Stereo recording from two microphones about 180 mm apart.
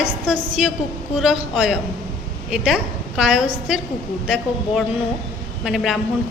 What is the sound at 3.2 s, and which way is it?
Speech, 5° right (ahead or behind).